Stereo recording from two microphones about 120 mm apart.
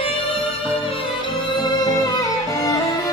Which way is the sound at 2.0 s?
30° left (ahead or behind).